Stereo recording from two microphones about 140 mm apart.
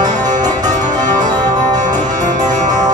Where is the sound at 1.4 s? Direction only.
60° right (ahead or behind).